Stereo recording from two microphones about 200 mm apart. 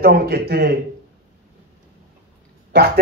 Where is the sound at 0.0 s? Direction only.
50° right (ahead or behind).